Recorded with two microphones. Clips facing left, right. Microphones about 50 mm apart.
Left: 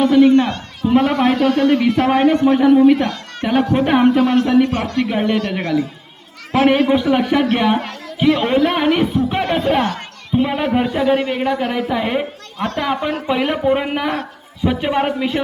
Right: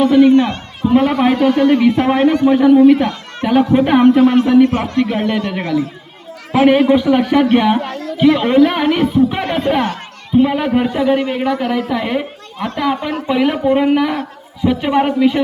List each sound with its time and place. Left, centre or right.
0.0 s a woman's voice: centre
0.3 s a man's voice: right
0.9 s a man's voice: centre
4.2 s a man's voice: centre
5.0 s a woman's voice: centre